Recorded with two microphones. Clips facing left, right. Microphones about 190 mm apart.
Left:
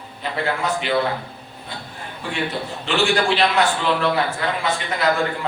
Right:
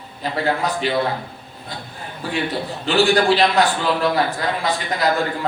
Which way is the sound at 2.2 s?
35° right (ahead or behind).